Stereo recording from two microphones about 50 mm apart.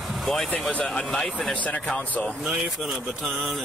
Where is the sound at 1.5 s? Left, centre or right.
Left.